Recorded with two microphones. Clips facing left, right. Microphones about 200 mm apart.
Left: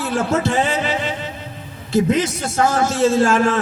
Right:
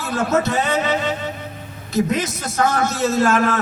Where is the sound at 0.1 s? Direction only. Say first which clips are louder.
Right 1 dB; 30° left (ahead or behind).